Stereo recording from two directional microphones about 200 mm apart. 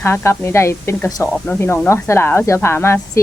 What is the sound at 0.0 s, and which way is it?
Speech, 10° left (ahead or behind).